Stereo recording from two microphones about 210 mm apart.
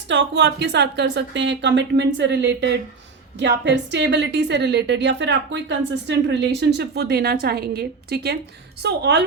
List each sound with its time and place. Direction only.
0.1 s a woman's voice: 55° right (ahead or behind)